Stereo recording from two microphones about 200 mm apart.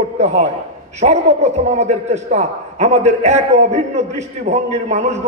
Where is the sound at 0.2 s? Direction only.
35° right (ahead or behind).